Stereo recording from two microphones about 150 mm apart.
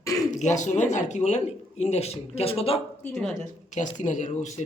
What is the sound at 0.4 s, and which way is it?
Speech, 50° left (ahead or behind).